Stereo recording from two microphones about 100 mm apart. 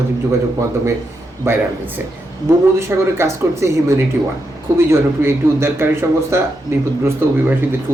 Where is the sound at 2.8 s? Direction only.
25° right (ahead or behind).